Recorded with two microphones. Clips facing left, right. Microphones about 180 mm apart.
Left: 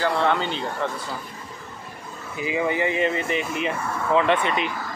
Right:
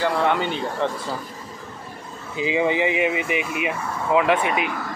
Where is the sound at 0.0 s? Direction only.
15° right (ahead or behind).